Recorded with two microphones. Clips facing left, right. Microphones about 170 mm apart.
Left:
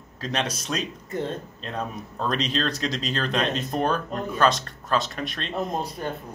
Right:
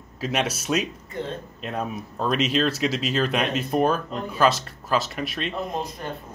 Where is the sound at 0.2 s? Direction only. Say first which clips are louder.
Right 3 dB; 10° right (ahead or behind).